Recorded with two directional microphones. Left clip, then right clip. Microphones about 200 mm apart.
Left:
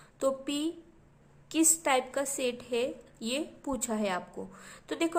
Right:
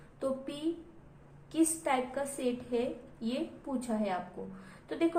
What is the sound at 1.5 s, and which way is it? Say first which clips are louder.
A woman's voice: left 3 dB; 40° left (ahead or behind).